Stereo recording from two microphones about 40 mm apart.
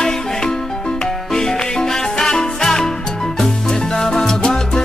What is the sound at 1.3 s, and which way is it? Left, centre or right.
Music, centre.